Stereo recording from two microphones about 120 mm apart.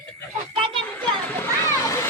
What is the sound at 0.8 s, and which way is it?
A child's voice, 15° left (ahead or behind).